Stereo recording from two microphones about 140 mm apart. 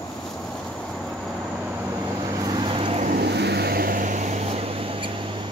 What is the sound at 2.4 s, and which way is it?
Vehicle, 35° right (ahead or behind).